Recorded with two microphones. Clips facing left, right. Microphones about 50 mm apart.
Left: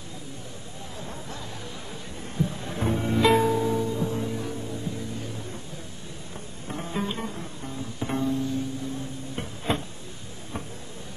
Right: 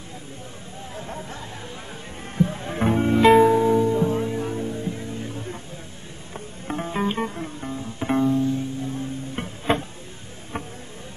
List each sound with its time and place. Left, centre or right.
0.9 s hubbub: right
2.3 s music: right